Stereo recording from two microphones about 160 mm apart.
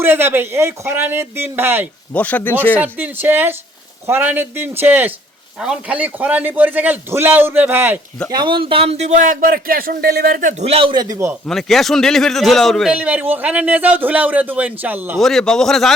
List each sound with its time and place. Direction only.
0.0 s a man's voice: 15° right (ahead or behind)
2.1 s speech: 10° left (ahead or behind)
2.7 s a man's voice: 10° right (ahead or behind)
8.3 s a man's voice: 30° right (ahead or behind); by 10.5 s 70° right (ahead or behind)
10.6 s speech: 35° right (ahead or behind)
11.4 s a man's voice: centre (ahead or behind)
15.2 s a man's voice: 5° left (ahead or behind)